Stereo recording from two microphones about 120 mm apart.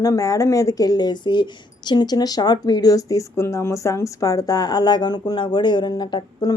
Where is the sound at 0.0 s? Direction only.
30° left (ahead or behind).